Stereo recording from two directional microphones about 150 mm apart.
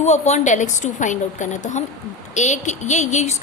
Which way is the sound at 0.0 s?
50° left (ahead or behind).